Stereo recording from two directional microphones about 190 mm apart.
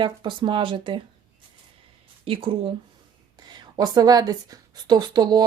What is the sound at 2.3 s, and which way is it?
A woman's voice, 30° right (ahead or behind).